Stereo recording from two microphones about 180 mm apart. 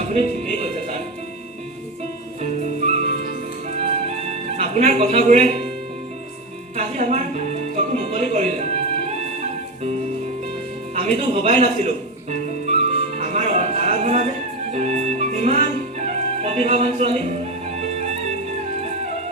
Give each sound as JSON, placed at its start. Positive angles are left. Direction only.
{"t": 0.0, "sound": "music", "side_deg": -40}
{"t": 2.4, "sound": "music", "side_deg": -40}
{"t": 4.5, "sound": "speech", "side_deg": -40}
{"t": 6.7, "sound": "music", "side_deg": -40}
{"t": 10.9, "sound": "music", "side_deg": -35}